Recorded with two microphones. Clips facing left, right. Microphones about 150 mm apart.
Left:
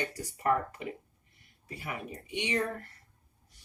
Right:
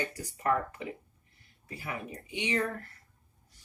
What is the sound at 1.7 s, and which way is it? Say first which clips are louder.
Speech: even; 25° left (ahead or behind).